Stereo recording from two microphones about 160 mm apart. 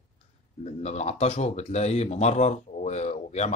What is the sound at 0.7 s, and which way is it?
Speech, 45° left (ahead or behind).